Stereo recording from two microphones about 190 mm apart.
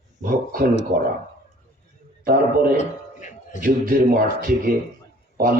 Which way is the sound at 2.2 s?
50° right (ahead or behind).